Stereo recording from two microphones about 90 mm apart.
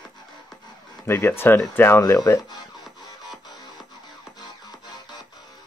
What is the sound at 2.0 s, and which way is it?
Speech, 40° left (ahead or behind).